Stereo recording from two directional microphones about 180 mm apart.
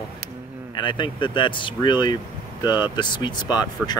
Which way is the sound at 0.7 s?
25° left (ahead or behind).